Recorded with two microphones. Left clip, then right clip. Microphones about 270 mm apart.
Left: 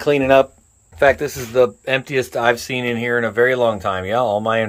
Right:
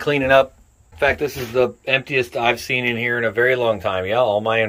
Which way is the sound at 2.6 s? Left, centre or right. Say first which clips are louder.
Right 1 dB; left.